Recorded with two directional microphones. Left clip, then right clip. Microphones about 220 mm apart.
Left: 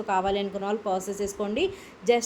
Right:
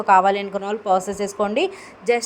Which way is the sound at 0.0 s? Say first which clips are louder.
Right 10 dB; 20° right (ahead or behind).